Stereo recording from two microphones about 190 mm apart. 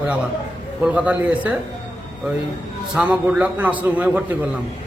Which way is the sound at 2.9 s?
5° right (ahead or behind).